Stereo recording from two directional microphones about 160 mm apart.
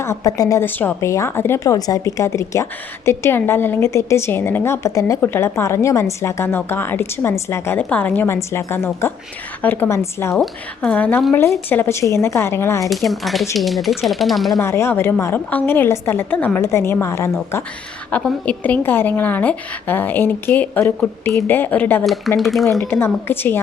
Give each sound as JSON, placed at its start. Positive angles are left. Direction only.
{"t": 0.0, "sound": "a woman's voice", "side_deg": 20}
{"t": 10.3, "sound": "a woman's voice", "side_deg": 5}
{"t": 12.9, "sound": "speech", "side_deg": 0}
{"t": 14.6, "sound": "a woman's voice", "side_deg": 15}
{"t": 22.4, "sound": "speech", "side_deg": 0}
{"t": 22.8, "sound": "a woman's voice", "side_deg": 15}